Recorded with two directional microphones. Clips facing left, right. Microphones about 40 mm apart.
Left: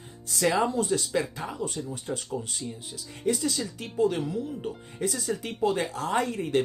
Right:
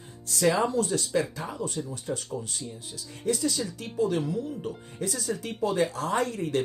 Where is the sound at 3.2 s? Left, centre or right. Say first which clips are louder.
Even; centre.